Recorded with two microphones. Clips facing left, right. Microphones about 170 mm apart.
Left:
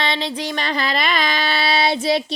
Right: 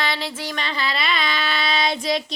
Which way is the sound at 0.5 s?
45° left (ahead or behind).